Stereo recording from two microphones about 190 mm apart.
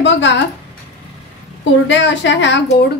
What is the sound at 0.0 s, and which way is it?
Speech, 70° left (ahead or behind).